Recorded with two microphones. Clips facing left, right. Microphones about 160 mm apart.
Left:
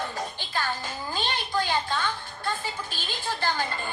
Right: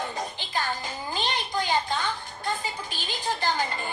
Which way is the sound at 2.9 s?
15° right (ahead or behind).